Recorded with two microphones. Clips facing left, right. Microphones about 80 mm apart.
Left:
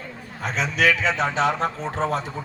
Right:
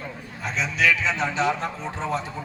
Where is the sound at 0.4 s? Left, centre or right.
Left.